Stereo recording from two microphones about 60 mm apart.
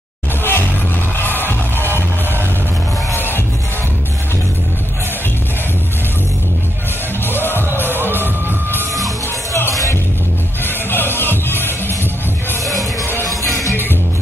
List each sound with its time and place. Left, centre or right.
0.4 s music: left
3.2 s music: left
7.2 s music: left
8.1 s music: right
10.6 s music: left
13.3 s music: left